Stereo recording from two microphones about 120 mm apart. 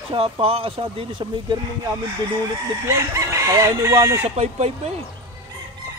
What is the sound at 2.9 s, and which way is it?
Chicken, 25° right (ahead or behind).